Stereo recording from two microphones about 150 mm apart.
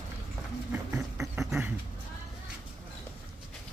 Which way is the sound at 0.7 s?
20° right (ahead or behind).